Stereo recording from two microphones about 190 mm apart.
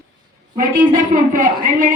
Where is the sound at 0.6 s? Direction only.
45° right (ahead or behind).